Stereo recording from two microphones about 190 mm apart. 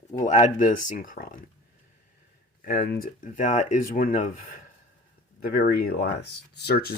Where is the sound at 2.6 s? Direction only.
50° left (ahead or behind).